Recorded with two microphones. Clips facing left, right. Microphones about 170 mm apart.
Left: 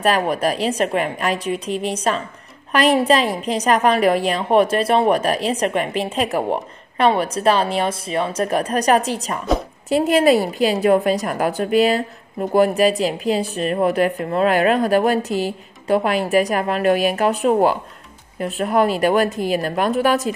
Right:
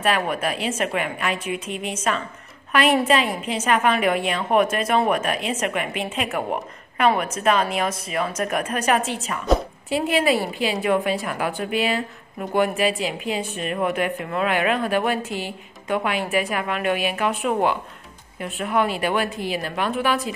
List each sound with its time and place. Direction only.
0.0 s a woman's voice: 35° left (ahead or behind)